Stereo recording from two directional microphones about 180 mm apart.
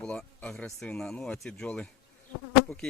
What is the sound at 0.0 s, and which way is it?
Speech, 5° left (ahead or behind).